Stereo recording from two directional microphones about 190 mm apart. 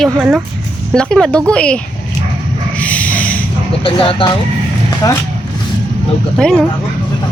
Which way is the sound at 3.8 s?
30° left (ahead or behind).